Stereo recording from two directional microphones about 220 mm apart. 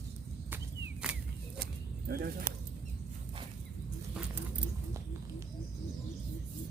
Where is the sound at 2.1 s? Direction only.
45° right (ahead or behind).